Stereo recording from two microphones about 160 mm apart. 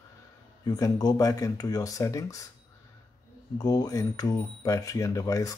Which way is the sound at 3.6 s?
25° left (ahead or behind).